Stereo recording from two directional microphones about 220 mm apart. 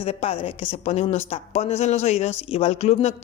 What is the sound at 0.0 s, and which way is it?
A woman's voice, 25° left (ahead or behind).